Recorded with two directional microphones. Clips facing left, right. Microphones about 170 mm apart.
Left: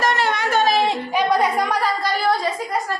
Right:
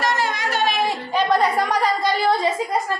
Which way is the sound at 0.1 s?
65° left (ahead or behind).